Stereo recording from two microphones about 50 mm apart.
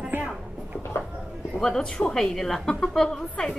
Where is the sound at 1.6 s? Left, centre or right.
Centre.